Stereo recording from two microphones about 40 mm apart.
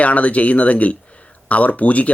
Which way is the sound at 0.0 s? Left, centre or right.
Left.